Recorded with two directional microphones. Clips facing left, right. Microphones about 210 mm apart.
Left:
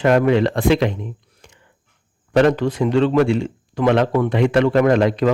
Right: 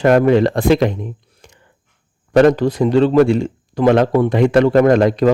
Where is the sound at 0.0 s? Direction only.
40° right (ahead or behind).